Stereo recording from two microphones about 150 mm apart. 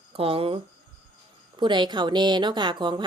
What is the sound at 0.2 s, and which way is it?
Speech, 40° right (ahead or behind).